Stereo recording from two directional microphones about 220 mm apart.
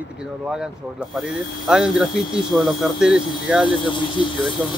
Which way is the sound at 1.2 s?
Centre (ahead or behind).